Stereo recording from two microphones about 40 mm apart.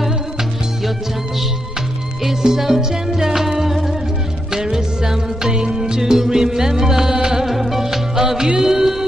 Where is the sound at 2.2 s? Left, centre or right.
Centre.